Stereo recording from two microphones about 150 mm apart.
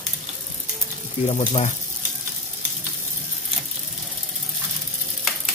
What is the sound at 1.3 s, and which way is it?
Speech, 40° left (ahead or behind).